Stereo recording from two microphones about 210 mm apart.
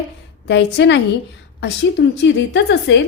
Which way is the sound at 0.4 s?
55° left (ahead or behind).